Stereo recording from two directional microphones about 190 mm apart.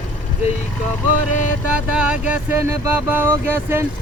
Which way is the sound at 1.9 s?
5° right (ahead or behind).